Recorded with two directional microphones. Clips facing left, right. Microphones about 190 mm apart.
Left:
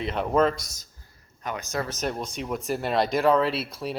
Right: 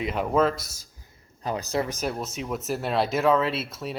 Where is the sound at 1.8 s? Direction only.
10° right (ahead or behind).